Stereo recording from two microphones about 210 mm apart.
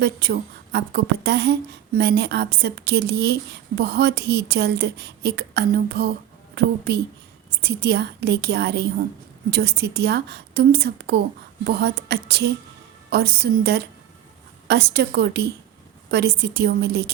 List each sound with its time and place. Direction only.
0.0 s a woman's voice: 50° right (ahead or behind)